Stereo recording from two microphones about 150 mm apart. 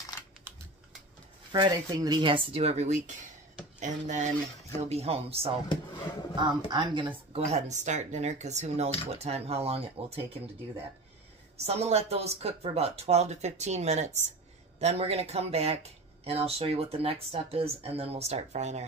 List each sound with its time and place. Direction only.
1.5 s speech: 25° right (ahead or behind)
11.5 s speech: 45° right (ahead or behind)